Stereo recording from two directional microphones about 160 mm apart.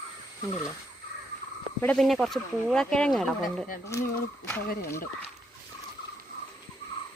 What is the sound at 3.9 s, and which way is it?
Speech, 15° left (ahead or behind).